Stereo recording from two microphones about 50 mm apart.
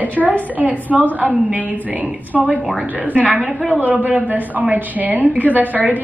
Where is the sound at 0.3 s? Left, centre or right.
Right.